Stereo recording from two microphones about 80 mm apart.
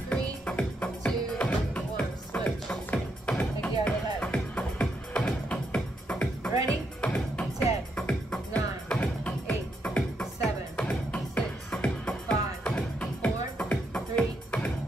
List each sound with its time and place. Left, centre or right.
0.1 s music: centre